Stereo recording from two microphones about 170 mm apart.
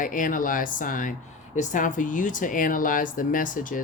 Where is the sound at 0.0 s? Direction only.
50° left (ahead or behind).